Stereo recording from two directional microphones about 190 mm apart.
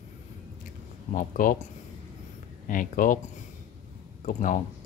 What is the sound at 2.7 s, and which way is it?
Speech, 45° left (ahead or behind).